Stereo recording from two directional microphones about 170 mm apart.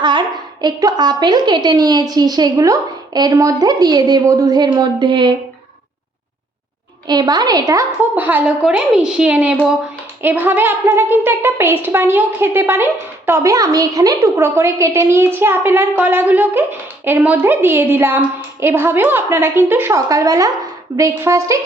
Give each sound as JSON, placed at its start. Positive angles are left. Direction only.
{"t": 0.0, "sound": "a woman's voice", "side_deg": -25}
{"t": 7.1, "sound": "a woman's voice", "side_deg": -25}